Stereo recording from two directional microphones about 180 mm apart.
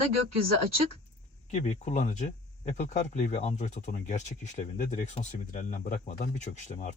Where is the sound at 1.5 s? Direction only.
40° left (ahead or behind).